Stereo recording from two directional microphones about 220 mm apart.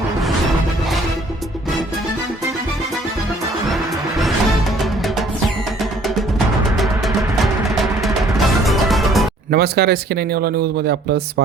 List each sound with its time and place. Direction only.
8.0 s music: centre (ahead or behind)
9.5 s speech: 45° right (ahead or behind)